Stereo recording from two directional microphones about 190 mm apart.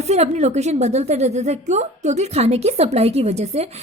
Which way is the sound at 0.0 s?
35° right (ahead or behind).